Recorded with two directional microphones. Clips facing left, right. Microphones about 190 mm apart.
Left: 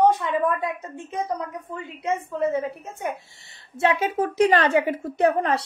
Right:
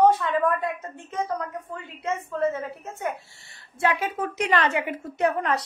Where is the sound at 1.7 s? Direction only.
15° left (ahead or behind).